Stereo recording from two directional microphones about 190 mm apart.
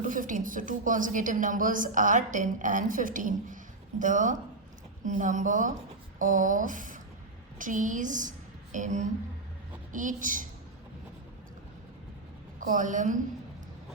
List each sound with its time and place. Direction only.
0.0 s a woman's voice: 45° right (ahead or behind)
12.5 s a woman's voice: 45° right (ahead or behind)